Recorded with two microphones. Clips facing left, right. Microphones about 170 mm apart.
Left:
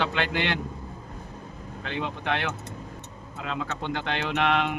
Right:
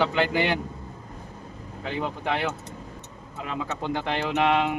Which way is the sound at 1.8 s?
10° right (ahead or behind).